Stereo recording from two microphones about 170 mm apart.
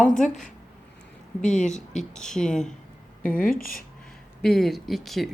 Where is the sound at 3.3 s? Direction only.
55° left (ahead or behind).